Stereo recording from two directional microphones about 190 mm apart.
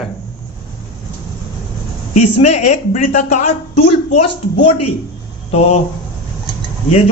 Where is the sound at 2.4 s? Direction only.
35° left (ahead or behind).